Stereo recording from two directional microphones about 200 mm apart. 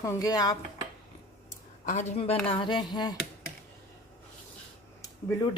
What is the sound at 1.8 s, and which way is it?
Speech, 35° left (ahead or behind).